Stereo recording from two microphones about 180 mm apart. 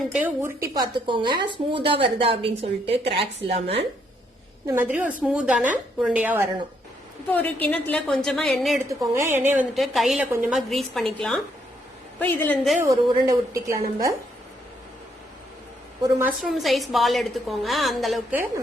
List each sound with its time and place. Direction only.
0.1 s a woman's voice: 10° right (ahead or behind); by 3.8 s 30° right (ahead or behind)
4.6 s a woman's voice: 15° right (ahead or behind)
7.3 s a woman's voice: 10° left (ahead or behind)
9.1 s a woman's voice: 15° right (ahead or behind)
9.7 s a woman's voice: centre (ahead or behind)
12.8 s a woman's voice: 20° right (ahead or behind)
16.0 s a woman's voice: 15° right (ahead or behind)
16.4 s a woman's voice: centre (ahead or behind)